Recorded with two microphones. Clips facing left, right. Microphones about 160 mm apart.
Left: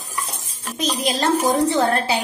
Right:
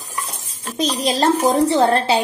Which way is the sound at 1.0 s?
35° right (ahead or behind).